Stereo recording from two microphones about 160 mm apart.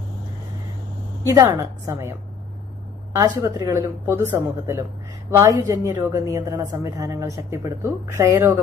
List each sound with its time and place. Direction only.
1.2 s a woman's voice: 20° right (ahead or behind)